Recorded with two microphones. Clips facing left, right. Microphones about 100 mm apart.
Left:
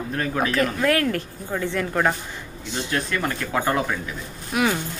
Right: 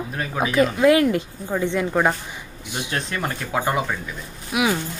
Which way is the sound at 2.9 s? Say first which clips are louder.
Left 2 dB; 25° right (ahead or behind).